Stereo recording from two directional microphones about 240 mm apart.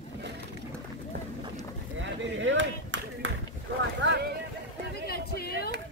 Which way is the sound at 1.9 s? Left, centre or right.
Right.